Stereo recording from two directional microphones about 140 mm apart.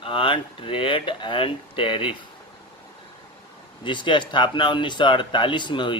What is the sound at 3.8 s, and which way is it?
Speech, 35° left (ahead or behind).